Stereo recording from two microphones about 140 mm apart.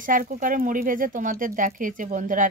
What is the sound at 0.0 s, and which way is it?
Speech, 75° right (ahead or behind).